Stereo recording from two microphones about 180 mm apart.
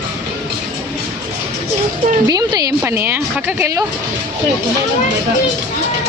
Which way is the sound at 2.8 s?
10° right (ahead or behind).